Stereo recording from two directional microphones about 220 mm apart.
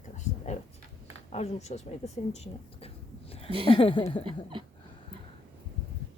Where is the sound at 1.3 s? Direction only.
30° left (ahead or behind).